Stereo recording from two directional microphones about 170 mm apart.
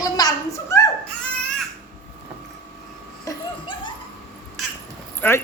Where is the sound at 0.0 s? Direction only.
20° left (ahead or behind).